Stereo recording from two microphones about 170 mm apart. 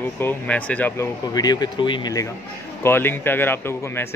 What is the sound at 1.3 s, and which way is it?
Speech, 25° left (ahead or behind).